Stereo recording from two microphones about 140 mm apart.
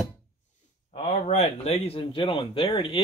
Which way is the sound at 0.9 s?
50° left (ahead or behind).